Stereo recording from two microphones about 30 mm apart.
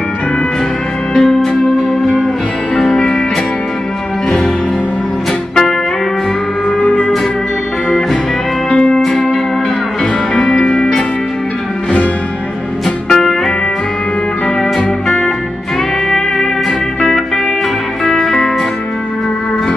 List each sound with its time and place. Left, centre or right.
1.1 s music: centre
6.8 s music: left
8.6 s music: left
9.0 s music: centre
10.3 s music: left
12.8 s music: centre
18.0 s music: centre